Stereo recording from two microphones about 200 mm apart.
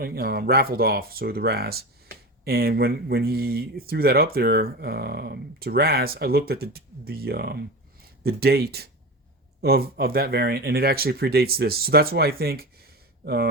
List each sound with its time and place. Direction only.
0.0 s speech: 50° right (ahead or behind)